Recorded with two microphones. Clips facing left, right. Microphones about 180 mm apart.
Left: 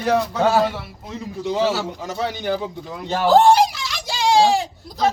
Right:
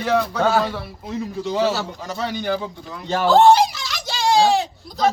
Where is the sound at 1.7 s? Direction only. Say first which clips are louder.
Left 1 dB; 15° left (ahead or behind).